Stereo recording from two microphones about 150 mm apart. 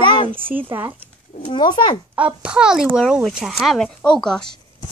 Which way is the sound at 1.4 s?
30° left (ahead or behind).